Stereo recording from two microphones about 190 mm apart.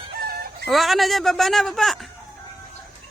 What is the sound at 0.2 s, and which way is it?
Chicken, 55° right (ahead or behind).